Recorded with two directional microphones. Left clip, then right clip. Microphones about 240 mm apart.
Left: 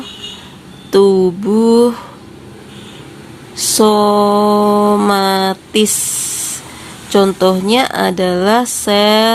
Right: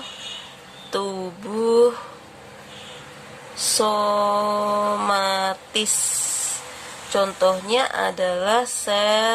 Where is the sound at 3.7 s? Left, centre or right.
Centre.